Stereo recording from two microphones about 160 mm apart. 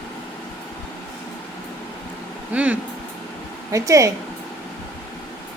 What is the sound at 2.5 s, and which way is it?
Speech, 10° right (ahead or behind).